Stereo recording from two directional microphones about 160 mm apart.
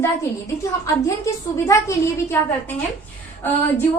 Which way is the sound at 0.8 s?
20° left (ahead or behind).